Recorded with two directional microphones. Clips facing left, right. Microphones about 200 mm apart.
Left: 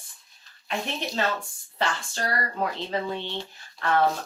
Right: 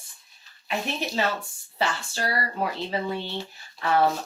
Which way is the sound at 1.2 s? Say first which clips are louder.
Right 1 dB; 10° right (ahead or behind).